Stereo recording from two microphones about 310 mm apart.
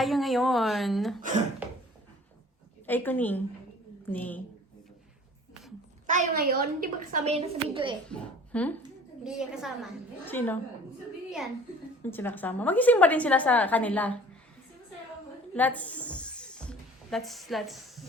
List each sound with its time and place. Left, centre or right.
0.0 s a woman's voice: centre
1.6 s a sound: centre
2.8 s a woman's voice: centre
6.1 s a woman's voice: right
8.1 s a woman's voice: centre
12.1 s a woman's voice: centre
15.5 s music: centre